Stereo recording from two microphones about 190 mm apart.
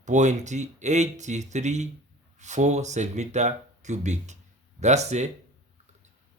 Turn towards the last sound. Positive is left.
turn(degrees=-35)  # may be behind; listen again after turning